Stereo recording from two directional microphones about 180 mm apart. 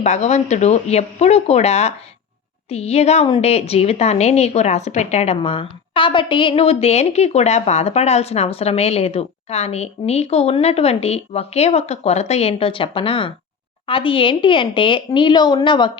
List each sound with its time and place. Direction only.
0.0 s a woman's voice: 40° left (ahead or behind)